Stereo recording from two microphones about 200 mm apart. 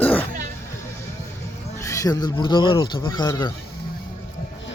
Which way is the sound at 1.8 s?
15° left (ahead or behind).